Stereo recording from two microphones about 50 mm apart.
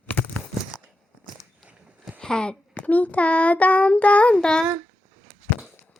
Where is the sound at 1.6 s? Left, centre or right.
Right.